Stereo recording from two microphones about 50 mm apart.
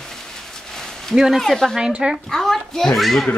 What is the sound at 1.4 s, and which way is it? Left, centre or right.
Speech, centre.